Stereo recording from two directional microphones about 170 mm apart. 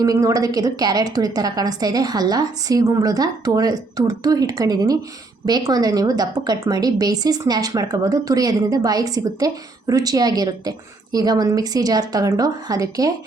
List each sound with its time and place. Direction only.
0.0 s a woman's voice: 20° right (ahead or behind)